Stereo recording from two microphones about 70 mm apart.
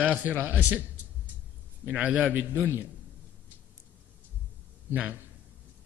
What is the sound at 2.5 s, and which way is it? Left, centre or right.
Speech, right.